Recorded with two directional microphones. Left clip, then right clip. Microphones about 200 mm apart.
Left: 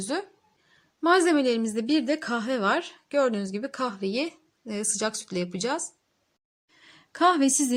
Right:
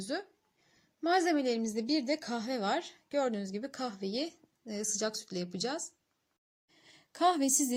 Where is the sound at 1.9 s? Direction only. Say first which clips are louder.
Left 7 dB; 55° left (ahead or behind).